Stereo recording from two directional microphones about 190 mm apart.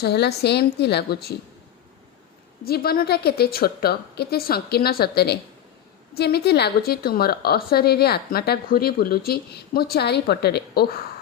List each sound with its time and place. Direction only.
0.0 s a woman's voice: 60° left (ahead or behind)
2.6 s a woman's voice: 55° left (ahead or behind)